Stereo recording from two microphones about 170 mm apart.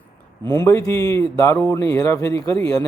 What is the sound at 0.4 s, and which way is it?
A man's voice, 20° left (ahead or behind).